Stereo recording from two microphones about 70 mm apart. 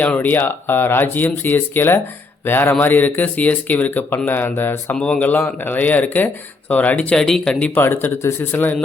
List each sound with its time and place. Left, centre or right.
0.0 s speech: left
4.9 s speech: centre
5.2 s speech: left
7.2 s speech: centre
7.7 s speech: left